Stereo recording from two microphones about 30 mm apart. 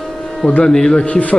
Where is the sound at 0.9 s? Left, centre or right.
Left.